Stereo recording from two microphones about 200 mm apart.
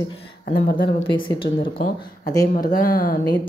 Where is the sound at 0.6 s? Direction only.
50° left (ahead or behind).